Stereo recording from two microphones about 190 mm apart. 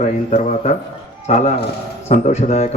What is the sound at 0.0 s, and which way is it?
A man's voice, 40° left (ahead or behind).